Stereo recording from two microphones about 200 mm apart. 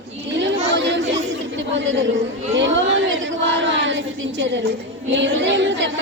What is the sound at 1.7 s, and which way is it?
Speech, 70° right (ahead or behind).